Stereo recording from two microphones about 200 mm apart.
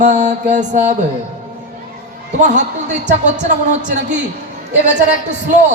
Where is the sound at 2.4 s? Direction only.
35° right (ahead or behind).